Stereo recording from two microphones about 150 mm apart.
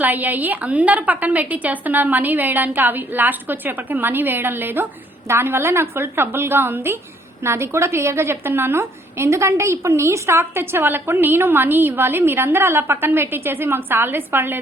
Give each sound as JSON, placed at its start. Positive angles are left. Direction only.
{"t": 0.0, "sound": "a woman's voice", "side_deg": -10}